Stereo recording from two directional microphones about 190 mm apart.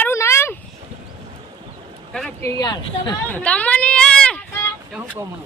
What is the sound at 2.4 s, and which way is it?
Speech, 20° left (ahead or behind).